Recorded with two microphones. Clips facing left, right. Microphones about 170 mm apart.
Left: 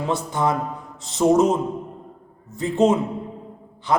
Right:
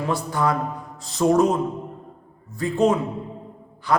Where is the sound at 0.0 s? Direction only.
20° left (ahead or behind).